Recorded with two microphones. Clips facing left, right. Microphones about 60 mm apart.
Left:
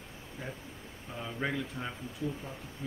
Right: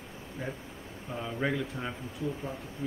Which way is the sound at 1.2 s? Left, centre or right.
Centre.